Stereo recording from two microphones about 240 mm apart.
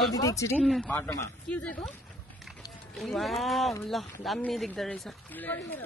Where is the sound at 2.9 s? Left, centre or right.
Centre.